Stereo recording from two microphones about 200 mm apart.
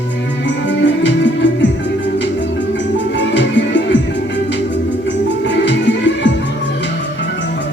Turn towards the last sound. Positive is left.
turn(degrees=65)  # may be behind; listen again after turning